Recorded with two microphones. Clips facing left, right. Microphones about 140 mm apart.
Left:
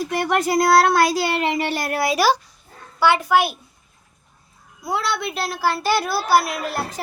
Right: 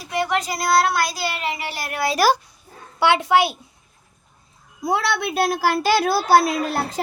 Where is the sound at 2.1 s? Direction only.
5° right (ahead or behind).